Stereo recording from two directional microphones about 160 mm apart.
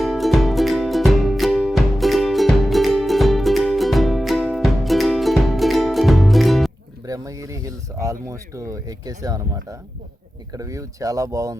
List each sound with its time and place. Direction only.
0.0 s music: centre (ahead or behind)
7.0 s speech: 20° right (ahead or behind)